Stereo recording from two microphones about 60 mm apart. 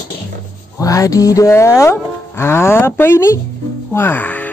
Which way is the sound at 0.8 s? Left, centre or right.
Left.